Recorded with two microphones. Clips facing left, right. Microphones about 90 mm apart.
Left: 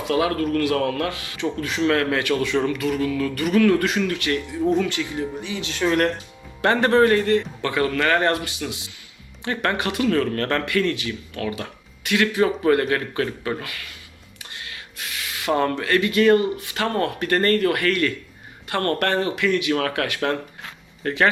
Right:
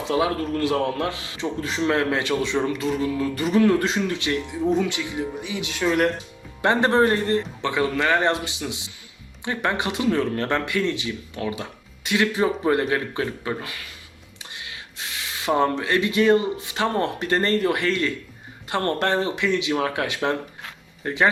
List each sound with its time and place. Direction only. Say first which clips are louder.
0.0 s a man's voice: left 1 dB; 20° right (ahead or behind); by 6.1 s 5° right (ahead or behind)
6.6 s a man's voice: left 2 dB; 20° right (ahead or behind)